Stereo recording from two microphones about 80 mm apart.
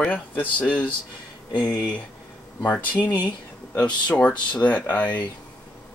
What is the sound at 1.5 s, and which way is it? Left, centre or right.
Speech, left.